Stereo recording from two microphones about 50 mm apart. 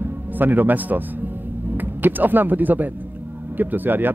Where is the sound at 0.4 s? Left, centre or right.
Right.